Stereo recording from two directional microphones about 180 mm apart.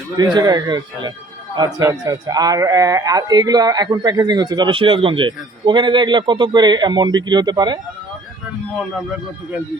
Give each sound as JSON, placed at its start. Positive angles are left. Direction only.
{"t": 0.3, "sound": "speech", "side_deg": -20}
{"t": 8.8, "sound": "speech", "side_deg": -5}